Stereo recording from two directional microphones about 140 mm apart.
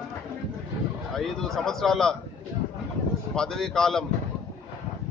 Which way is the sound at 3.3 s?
5° left (ahead or behind).